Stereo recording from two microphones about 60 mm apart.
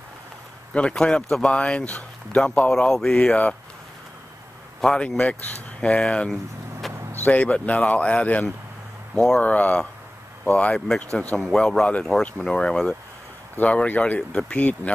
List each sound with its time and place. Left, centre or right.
0.7 s speech: centre
4.8 s speech: centre
6.8 s vehicle: centre
7.2 s speech: left
9.1 s speech: centre
9.4 s speech: left